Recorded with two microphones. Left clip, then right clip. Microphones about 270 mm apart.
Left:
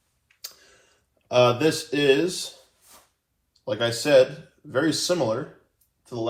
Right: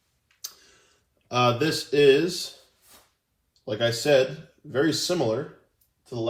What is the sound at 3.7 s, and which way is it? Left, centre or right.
Speech, centre.